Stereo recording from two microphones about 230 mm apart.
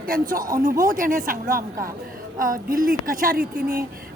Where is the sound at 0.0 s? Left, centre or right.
Right.